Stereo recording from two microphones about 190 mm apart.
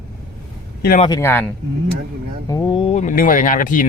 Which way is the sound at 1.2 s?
10° left (ahead or behind).